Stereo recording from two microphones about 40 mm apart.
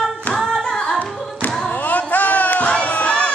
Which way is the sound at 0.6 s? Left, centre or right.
Centre.